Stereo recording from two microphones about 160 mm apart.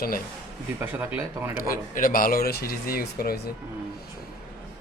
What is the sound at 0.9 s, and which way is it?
Speech, 15° right (ahead or behind).